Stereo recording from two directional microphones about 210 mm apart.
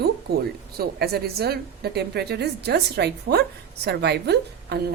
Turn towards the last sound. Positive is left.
turn(degrees=-50)  # may be behind; listen again after turning